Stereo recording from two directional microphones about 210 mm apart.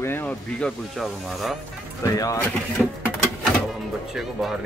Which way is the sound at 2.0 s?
15° left (ahead or behind).